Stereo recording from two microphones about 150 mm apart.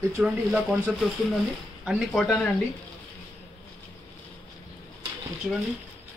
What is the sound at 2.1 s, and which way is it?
Speech, 5° left (ahead or behind).